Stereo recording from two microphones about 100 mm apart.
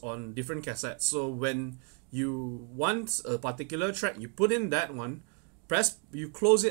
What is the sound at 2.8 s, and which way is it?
Speech, 30° right (ahead or behind).